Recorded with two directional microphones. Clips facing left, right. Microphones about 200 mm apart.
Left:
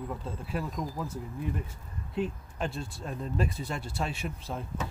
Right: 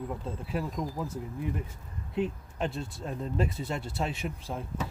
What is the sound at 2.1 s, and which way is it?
Speech, 20° right (ahead or behind).